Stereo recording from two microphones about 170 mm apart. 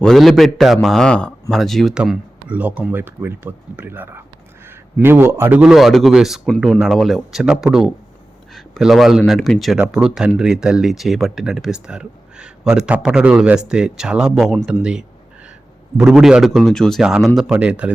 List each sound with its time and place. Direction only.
0.0 s speech: centre (ahead or behind)